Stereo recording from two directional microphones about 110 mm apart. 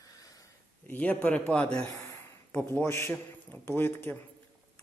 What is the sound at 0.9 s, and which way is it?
A man's voice, 15° left (ahead or behind).